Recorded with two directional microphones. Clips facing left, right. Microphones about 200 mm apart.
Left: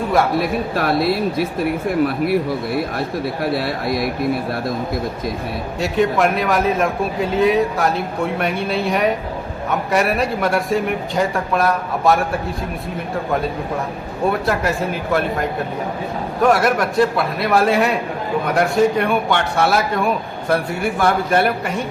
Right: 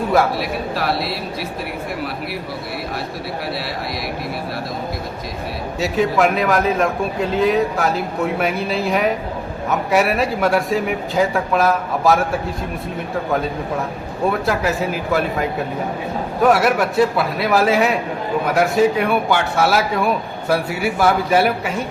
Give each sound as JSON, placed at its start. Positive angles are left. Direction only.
{"t": 0.3, "sound": "speech", "side_deg": 50}
{"t": 3.5, "sound": "speech", "side_deg": 50}
{"t": 5.8, "sound": "a man's voice", "side_deg": 0}
{"t": 14.4, "sound": "a man's voice", "side_deg": -5}